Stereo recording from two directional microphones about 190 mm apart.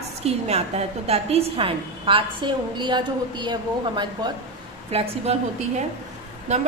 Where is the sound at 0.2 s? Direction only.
35° right (ahead or behind).